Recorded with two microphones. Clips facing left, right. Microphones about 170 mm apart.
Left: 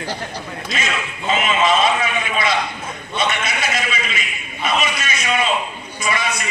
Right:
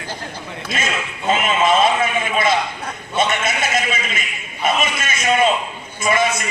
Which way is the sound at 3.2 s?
50° right (ahead or behind).